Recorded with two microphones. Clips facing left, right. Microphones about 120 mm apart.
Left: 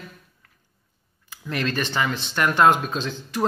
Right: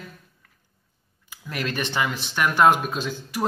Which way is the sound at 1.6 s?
15° right (ahead or behind).